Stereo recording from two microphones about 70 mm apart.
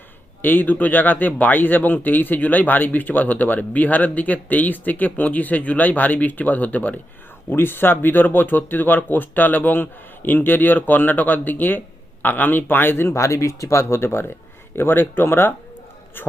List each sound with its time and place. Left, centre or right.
0.4 s speech: left
13.2 s speech: left